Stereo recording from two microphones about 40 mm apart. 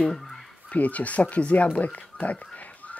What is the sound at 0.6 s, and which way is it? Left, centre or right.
Speech, left.